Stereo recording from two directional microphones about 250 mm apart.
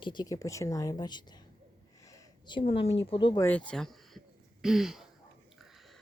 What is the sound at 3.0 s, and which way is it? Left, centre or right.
Speech, left.